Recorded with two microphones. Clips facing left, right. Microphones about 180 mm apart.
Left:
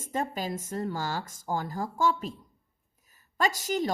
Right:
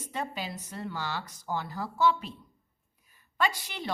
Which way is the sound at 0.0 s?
45° left (ahead or behind).